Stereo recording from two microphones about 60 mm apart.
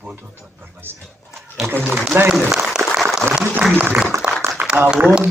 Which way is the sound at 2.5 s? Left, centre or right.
Centre.